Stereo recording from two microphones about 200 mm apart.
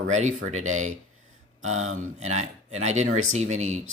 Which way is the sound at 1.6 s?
90° right.